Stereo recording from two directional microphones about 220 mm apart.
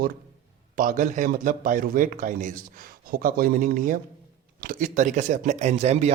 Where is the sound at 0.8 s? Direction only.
35° right (ahead or behind).